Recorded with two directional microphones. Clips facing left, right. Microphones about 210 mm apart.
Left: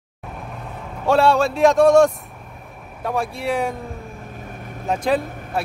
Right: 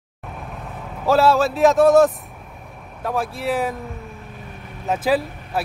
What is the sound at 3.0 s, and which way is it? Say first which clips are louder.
Speech: even; centre (ahead or behind).